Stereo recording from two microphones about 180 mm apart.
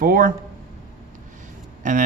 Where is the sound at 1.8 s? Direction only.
45° right (ahead or behind).